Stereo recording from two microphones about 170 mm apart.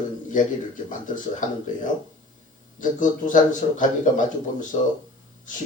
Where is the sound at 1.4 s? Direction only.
50° left (ahead or behind).